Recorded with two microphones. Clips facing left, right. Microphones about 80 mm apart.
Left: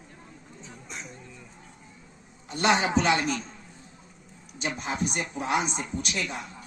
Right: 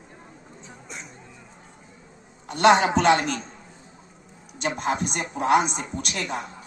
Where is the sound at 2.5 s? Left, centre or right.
Right.